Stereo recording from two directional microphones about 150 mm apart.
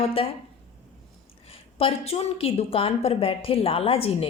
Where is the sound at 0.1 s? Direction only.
40° left (ahead or behind).